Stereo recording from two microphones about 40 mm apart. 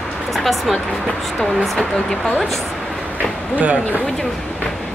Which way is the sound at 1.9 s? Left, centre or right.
Centre.